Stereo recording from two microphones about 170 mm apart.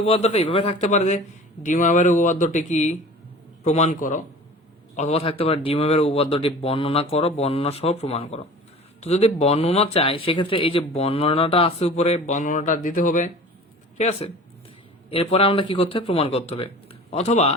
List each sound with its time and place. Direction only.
0.0 s speech: 40° left (ahead or behind)
14.0 s speech: 35° left (ahead or behind)